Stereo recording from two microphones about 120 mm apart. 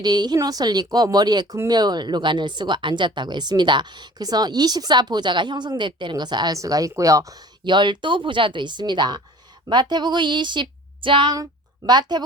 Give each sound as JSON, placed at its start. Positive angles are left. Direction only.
{"t": 0.0, "sound": "speech", "side_deg": -35}